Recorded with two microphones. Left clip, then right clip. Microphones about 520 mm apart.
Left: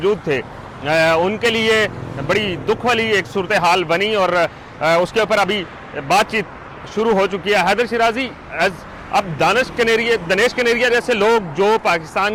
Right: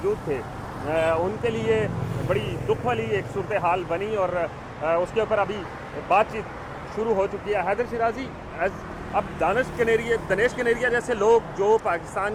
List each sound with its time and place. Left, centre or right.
0.9 s speech: left